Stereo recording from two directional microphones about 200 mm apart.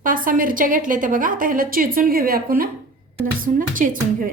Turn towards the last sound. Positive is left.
turn(degrees=-45)  # may be behind; listen again after turning